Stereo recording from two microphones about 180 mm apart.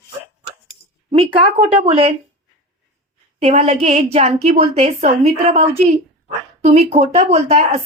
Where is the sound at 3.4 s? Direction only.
35° right (ahead or behind).